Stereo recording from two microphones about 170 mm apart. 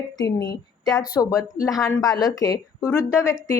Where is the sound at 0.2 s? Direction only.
20° left (ahead or behind).